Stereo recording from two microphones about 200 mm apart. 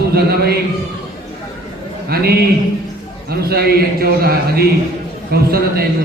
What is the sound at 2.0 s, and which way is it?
A man's voice, 50° right (ahead or behind).